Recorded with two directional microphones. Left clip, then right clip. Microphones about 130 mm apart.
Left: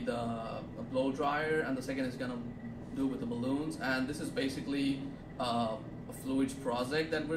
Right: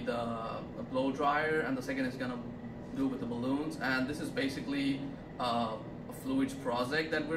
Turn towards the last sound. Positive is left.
turn(degrees=5)  # may be behind; listen again after turning